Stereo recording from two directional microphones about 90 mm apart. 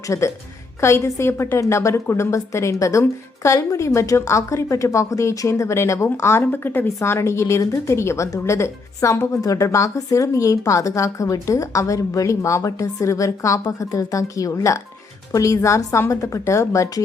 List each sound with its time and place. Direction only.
0.1 s a woman's voice: 35° left (ahead or behind)